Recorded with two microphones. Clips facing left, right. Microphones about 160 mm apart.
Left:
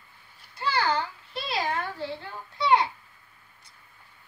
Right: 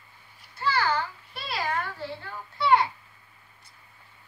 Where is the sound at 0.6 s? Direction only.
20° left (ahead or behind).